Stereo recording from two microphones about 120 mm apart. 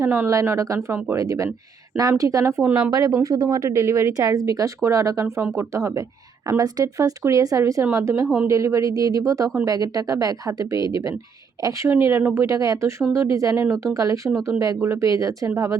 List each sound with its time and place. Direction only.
0.0 s speech: 20° right (ahead or behind)
2.6 s speech: 10° right (ahead or behind)
2.9 s speech: 30° right (ahead or behind)